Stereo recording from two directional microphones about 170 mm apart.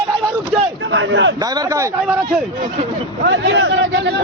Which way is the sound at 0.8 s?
90° right.